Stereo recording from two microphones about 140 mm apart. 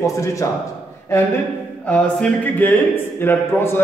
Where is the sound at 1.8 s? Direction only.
10° left (ahead or behind).